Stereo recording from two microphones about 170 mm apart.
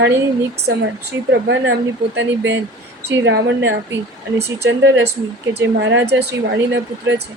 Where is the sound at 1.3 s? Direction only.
90° right.